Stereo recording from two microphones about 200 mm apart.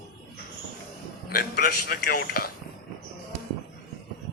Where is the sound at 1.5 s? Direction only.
50° left (ahead or behind).